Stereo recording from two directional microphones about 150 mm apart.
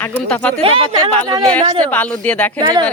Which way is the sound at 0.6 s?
40° right (ahead or behind).